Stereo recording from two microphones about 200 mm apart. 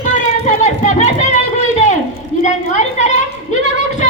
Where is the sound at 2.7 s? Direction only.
35° left (ahead or behind).